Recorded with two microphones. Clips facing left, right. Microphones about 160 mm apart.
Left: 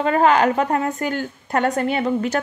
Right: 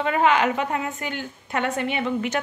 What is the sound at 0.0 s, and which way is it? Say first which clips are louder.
A woman's voice: left 4 dB; 40° left (ahead or behind).